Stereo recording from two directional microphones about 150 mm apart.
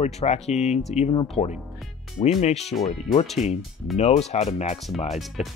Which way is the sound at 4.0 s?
45° left (ahead or behind).